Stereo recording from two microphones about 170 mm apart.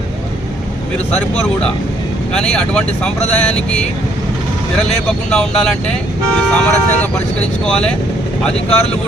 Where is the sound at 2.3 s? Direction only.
5° left (ahead or behind).